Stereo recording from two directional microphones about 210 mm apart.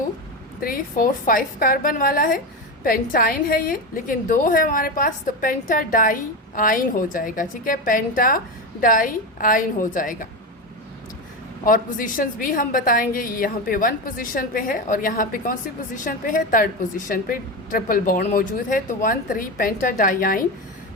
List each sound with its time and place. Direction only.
0.6 s a woman's voice: 45° left (ahead or behind)
11.6 s a woman's voice: 40° left (ahead or behind)